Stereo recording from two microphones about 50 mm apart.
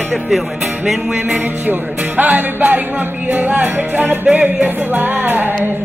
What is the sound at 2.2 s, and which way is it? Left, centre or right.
Music, right.